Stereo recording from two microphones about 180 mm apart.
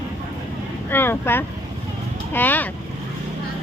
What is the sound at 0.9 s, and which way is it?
Vehicle, 10° left (ahead or behind).